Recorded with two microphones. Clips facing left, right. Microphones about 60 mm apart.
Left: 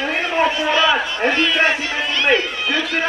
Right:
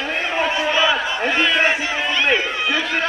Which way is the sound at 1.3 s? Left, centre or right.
Centre.